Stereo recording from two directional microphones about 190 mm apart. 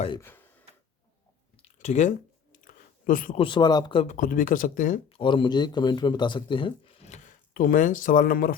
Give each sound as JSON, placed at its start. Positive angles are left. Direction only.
{"t": 0.2, "sound": "speech", "side_deg": 10}
{"t": 1.5, "sound": "chewing", "side_deg": 35}
{"t": 3.0, "sound": "a man's voice", "side_deg": 45}
{"t": 3.3, "sound": "speech", "side_deg": 25}
{"t": 4.0, "sound": "speech", "side_deg": 40}
{"t": 5.0, "sound": "speech", "side_deg": 25}